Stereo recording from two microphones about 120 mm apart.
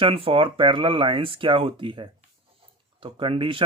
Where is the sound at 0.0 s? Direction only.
50° right (ahead or behind).